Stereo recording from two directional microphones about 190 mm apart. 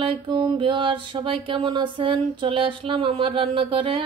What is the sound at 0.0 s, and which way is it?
Mantra, 25° right (ahead or behind).